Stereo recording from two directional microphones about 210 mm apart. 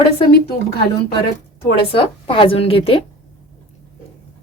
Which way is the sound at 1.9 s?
25° left (ahead or behind).